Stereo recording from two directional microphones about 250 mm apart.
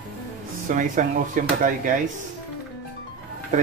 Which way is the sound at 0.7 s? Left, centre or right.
Right.